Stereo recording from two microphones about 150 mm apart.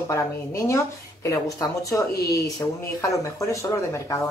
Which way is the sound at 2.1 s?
90° left.